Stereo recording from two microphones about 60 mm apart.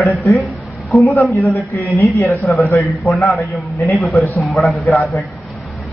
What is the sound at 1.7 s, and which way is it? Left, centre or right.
Speech, left.